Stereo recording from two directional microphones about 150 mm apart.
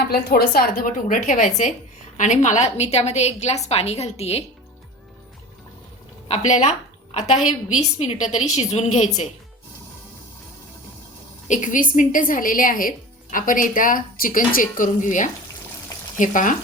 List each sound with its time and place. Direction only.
0.1 s a woman's voice: 90° left; by 4.4 s 45° left (ahead or behind)
6.2 s a woman's voice: 50° left (ahead or behind)
11.4 s a woman's voice: 55° left (ahead or behind)